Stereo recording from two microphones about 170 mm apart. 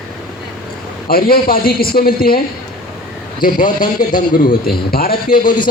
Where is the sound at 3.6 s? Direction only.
25° left (ahead or behind).